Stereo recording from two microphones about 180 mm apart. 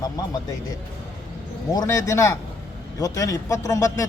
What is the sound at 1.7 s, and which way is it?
A man's voice, 15° left (ahead or behind).